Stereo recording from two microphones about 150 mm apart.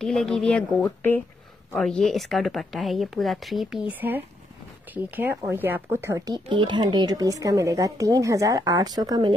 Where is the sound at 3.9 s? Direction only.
10° right (ahead or behind).